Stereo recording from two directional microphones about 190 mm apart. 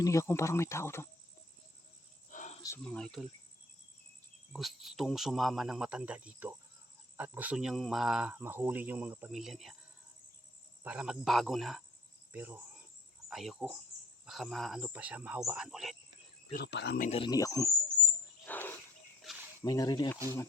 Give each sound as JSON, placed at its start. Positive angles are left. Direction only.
{"t": 0.0, "sound": "speech", "side_deg": 15}
{"t": 2.3, "sound": "cricket", "side_deg": 40}
{"t": 2.6, "sound": "speech", "side_deg": 15}
{"t": 2.8, "sound": "speech", "side_deg": 5}
{"t": 4.5, "sound": "speech", "side_deg": 0}
{"t": 10.8, "sound": "speech", "side_deg": -5}
{"t": 16.6, "sound": "speech", "side_deg": 65}
{"t": 17.1, "sound": "speech", "side_deg": 25}
{"t": 18.4, "sound": "wild animals", "side_deg": 10}
{"t": 19.2, "sound": "cricket", "side_deg": 0}
{"t": 19.6, "sound": "speech", "side_deg": 20}